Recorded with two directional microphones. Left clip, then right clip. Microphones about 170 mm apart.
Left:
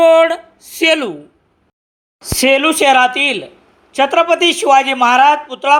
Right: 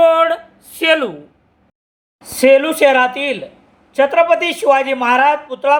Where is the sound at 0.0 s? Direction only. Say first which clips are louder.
Left 2 dB; 25° left (ahead or behind).